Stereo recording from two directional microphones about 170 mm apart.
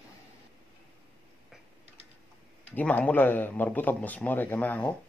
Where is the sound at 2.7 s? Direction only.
10° left (ahead or behind).